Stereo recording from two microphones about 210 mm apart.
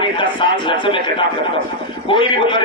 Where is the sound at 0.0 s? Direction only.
25° left (ahead or behind).